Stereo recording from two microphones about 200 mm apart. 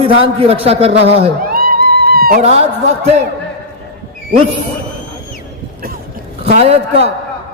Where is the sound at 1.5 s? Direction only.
50° right (ahead or behind).